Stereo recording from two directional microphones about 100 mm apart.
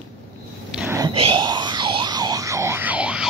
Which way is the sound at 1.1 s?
60° right (ahead or behind).